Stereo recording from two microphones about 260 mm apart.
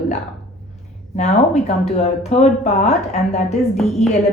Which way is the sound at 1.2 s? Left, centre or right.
Left.